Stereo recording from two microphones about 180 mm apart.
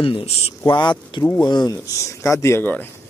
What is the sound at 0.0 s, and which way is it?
Speech, 30° left (ahead or behind).